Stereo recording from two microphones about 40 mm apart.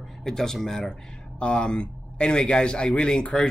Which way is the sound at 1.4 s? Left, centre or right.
Left.